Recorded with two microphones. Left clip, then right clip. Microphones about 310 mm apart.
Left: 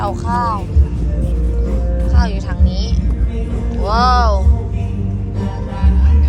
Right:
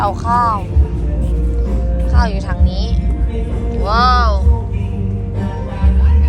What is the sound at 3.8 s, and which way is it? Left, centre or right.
Speech, centre.